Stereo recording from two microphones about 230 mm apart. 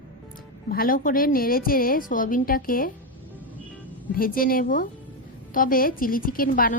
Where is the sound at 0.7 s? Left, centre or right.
Left.